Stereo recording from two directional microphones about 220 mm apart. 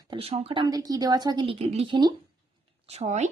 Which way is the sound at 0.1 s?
25° right (ahead or behind).